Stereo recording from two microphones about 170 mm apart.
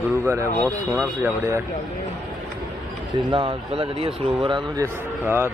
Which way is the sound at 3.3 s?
30° right (ahead or behind).